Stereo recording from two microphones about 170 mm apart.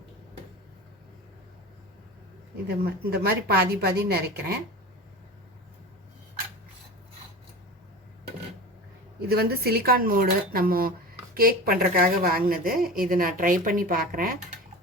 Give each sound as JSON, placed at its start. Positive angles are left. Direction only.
{"t": 2.6, "sound": "a woman's voice", "side_deg": -65}
{"t": 9.2, "sound": "speech", "side_deg": -65}